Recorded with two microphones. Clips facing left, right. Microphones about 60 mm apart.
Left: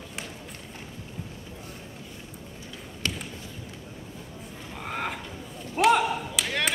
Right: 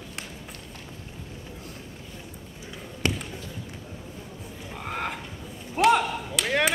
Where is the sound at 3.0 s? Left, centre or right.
Right.